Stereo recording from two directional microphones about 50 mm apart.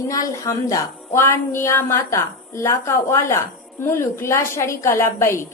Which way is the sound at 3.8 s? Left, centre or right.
Left.